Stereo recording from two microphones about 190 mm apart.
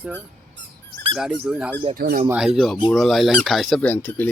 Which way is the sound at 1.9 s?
55° right (ahead or behind).